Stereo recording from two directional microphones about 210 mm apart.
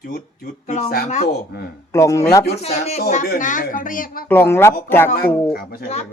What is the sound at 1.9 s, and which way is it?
Speech, 15° left (ahead or behind).